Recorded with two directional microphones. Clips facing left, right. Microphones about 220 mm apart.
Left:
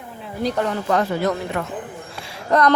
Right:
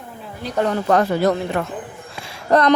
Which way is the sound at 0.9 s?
45° right (ahead or behind).